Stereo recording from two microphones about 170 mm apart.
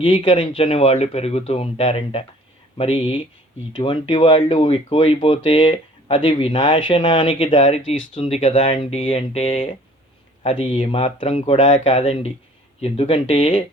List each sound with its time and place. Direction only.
0.0 s speech: 30° left (ahead or behind)